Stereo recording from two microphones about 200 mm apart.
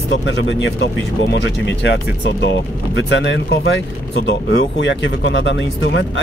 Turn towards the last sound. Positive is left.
turn(degrees=65)  # may be behind; listen again after turning